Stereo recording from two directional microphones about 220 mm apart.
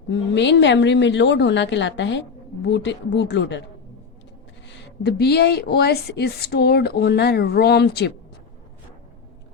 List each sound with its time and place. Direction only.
0.3 s speech: 55° left (ahead or behind)
4.7 s speech: 50° left (ahead or behind)